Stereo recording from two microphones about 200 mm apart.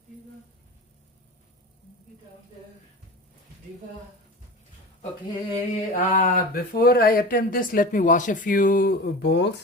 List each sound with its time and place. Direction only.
5.5 s speech: 40° left (ahead or behind); by 9.6 s 60° left (ahead or behind)